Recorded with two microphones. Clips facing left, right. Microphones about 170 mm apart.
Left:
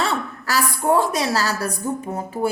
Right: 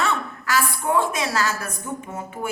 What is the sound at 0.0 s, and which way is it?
A woman's voice, 35° left (ahead or behind).